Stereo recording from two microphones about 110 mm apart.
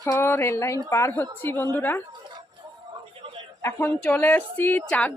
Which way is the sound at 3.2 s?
55° right (ahead or behind).